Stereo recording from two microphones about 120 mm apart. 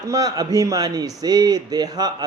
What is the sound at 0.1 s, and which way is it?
A man's voice, 30° right (ahead or behind).